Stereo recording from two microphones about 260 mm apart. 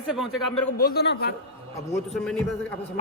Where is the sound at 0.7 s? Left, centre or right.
Left.